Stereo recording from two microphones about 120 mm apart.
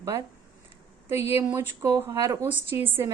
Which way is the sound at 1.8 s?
25° right (ahead or behind).